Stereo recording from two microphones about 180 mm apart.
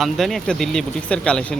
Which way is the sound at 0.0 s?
Centre (ahead or behind).